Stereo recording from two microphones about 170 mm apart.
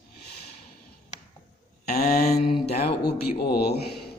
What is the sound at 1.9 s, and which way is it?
Speech, 70° left (ahead or behind).